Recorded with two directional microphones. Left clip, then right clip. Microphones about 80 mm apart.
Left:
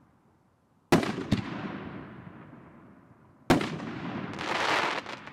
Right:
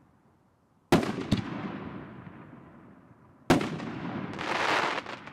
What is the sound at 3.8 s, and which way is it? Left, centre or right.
Artillery fire, left.